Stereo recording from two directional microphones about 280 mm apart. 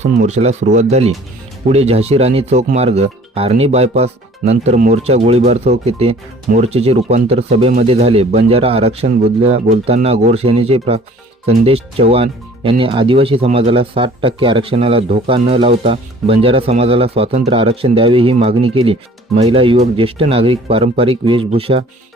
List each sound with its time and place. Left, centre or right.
0.0 s speech: right